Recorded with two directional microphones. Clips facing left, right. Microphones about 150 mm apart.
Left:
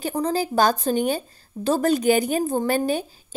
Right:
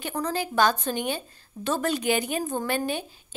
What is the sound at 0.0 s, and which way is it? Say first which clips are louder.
A woman's voice: left 5 dB; 30° left (ahead or behind).